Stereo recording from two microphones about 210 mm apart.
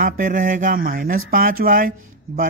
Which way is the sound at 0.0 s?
40° right (ahead or behind).